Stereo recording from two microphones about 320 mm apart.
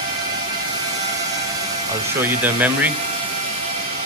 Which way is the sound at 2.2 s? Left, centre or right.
Centre.